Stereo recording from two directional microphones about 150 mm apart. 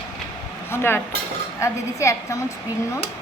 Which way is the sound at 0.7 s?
15° left (ahead or behind).